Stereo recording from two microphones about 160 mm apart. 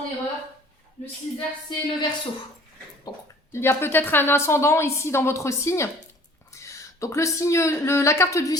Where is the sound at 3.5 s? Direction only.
15° left (ahead or behind).